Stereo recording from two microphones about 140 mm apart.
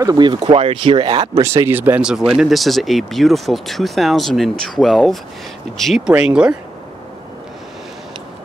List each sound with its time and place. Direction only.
0.0 s speech: 30° right (ahead or behind); by 6.5 s 5° right (ahead or behind)